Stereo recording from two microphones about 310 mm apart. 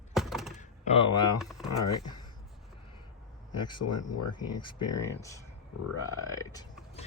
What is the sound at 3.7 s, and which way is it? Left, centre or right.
Speech, left.